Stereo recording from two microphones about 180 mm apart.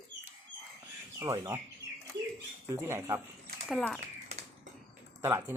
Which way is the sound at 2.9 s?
15° right (ahead or behind).